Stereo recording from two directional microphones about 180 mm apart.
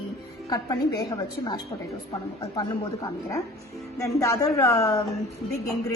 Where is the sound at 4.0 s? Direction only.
20° left (ahead or behind).